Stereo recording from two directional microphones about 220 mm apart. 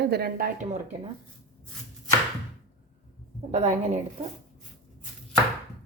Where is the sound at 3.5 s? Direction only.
30° right (ahead or behind).